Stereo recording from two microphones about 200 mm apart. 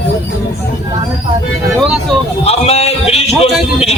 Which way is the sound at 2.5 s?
30° left (ahead or behind).